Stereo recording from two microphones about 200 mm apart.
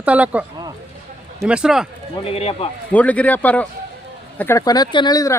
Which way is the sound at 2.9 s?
5° left (ahead or behind).